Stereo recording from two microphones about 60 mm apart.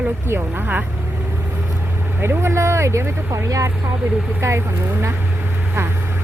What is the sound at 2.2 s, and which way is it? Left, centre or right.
Speech, right.